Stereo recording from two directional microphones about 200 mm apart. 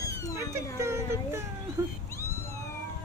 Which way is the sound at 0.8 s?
15° right (ahead or behind).